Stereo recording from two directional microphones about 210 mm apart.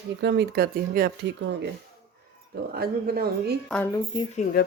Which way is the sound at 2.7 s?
45° right (ahead or behind).